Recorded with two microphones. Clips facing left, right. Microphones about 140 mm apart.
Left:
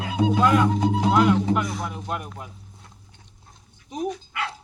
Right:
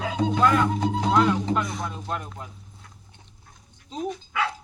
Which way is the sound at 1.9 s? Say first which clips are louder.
Left 1 dB; 15° left (ahead or behind).